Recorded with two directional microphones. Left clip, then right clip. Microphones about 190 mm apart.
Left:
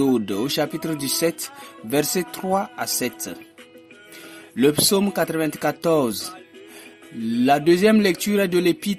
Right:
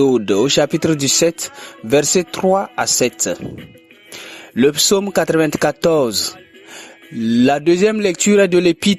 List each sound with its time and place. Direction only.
0.0 s speech: 35° right (ahead or behind)
4.5 s speech: 35° right (ahead or behind)
7.3 s speech: 40° right (ahead or behind)